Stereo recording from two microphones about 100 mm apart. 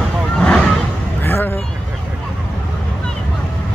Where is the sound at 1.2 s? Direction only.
20° left (ahead or behind).